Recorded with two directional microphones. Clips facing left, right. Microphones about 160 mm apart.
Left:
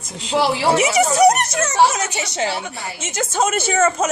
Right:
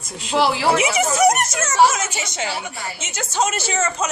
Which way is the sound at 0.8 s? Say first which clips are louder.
Left 3 dB; 40° left (ahead or behind).